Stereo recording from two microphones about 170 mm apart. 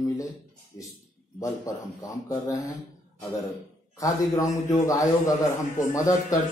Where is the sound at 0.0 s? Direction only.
20° left (ahead or behind).